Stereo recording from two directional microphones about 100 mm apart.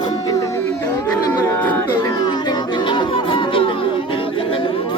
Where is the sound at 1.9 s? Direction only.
40° left (ahead or behind).